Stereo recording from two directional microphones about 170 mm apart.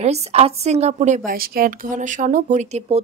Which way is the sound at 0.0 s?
40° right (ahead or behind).